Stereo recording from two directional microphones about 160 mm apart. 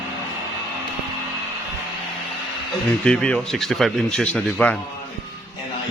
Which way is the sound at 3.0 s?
5° left (ahead or behind).